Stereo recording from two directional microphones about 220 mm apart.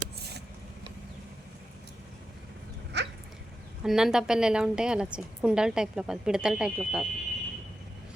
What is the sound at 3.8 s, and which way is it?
A woman's voice, centre (ahead or behind).